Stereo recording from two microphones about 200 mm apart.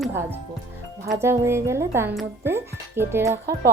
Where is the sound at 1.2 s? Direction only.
15° right (ahead or behind).